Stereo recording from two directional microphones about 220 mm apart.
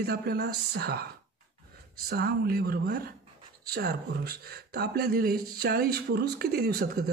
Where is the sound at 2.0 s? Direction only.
45° right (ahead or behind).